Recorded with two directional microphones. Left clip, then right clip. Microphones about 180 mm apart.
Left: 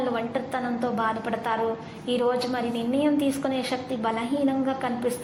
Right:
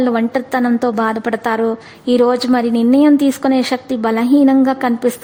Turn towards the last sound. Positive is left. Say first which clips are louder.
# right 12 dB
turn(degrees=-40)  # may be behind; listen again after turning